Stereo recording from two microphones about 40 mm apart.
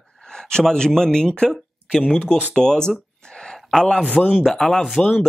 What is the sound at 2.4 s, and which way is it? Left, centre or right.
Speech, centre.